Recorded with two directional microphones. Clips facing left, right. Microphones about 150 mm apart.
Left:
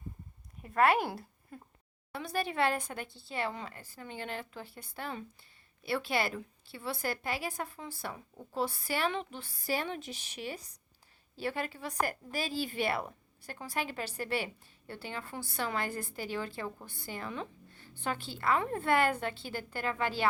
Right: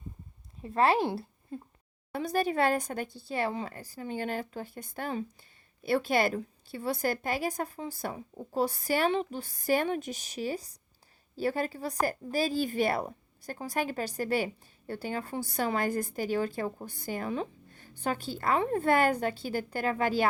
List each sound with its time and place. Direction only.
0.6 s speech: 30° right (ahead or behind)
2.1 s a woman's voice: 45° right (ahead or behind)